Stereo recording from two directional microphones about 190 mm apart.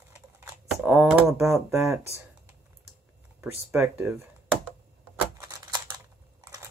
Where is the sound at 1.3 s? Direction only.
15° right (ahead or behind).